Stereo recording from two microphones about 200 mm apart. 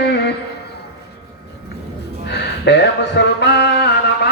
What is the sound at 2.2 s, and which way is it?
Music, 60° left (ahead or behind).